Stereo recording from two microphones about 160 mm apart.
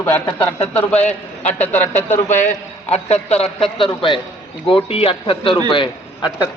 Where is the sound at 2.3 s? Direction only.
45° left (ahead or behind).